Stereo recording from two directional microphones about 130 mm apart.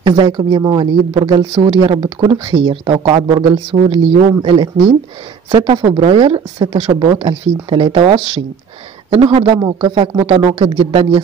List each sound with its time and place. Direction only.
0.0 s speech: 35° right (ahead or behind)
3.7 s speech: 55° right (ahead or behind)
4.4 s speech: 35° right (ahead or behind)